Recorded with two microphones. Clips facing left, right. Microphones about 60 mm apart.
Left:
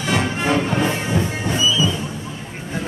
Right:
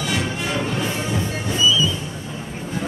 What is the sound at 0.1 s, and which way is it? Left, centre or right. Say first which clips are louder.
Music: left 7 dB; left.